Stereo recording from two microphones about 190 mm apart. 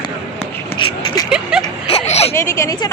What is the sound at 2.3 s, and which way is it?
Speech, 15° left (ahead or behind).